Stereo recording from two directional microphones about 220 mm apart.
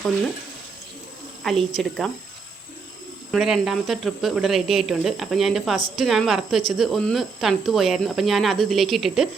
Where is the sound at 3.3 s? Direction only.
Centre (ahead or behind).